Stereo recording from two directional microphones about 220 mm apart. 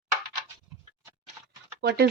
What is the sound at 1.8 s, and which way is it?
Speech, 50° right (ahead or behind).